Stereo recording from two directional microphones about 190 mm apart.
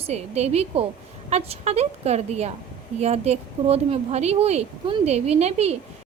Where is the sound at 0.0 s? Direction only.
35° right (ahead or behind).